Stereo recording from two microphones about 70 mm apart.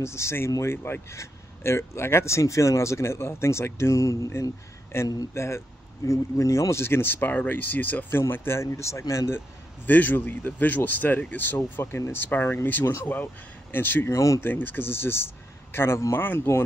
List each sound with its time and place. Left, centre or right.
0.0 s speech: left
9.8 s speech: left
14.1 s speech: left
14.4 s speech: left